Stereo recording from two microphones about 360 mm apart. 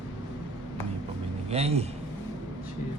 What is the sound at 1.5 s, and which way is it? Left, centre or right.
Speech, centre.